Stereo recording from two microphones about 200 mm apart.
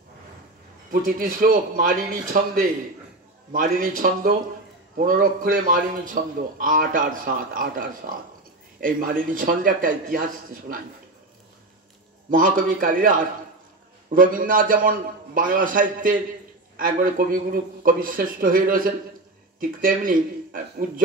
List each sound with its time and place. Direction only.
1.0 s a man's voice: 45° right (ahead or behind)
3.5 s a man's voice: 45° right (ahead or behind)
12.3 s a man's voice: 45° right (ahead or behind)